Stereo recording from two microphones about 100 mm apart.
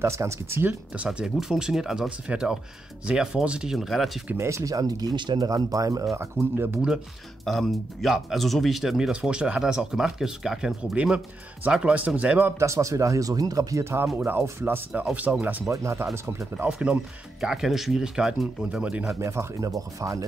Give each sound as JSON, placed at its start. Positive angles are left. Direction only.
{"t": 0.0, "sound": "speech", "side_deg": -30}
{"t": 0.9, "sound": "speech", "side_deg": -10}
{"t": 4.4, "sound": "speech", "side_deg": -30}
{"t": 5.5, "sound": "speech", "side_deg": -35}
{"t": 6.1, "sound": "speech", "side_deg": -25}
{"t": 7.4, "sound": "speech", "side_deg": 0}
{"t": 12.6, "sound": "speech", "side_deg": -30}
{"t": 15.3, "sound": "speech", "side_deg": -10}
{"t": 15.7, "sound": "speech", "side_deg": -30}
{"t": 16.5, "sound": "speech", "side_deg": -10}
{"t": 19.1, "sound": "speech", "side_deg": -30}